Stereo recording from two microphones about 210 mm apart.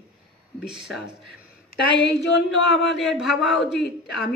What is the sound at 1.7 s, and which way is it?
Speech, 55° left (ahead or behind).